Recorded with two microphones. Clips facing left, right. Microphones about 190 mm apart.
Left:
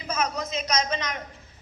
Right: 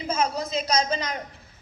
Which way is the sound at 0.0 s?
30° right (ahead or behind).